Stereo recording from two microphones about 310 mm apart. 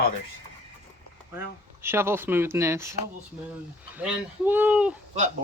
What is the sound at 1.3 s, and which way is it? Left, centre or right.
Speech, centre.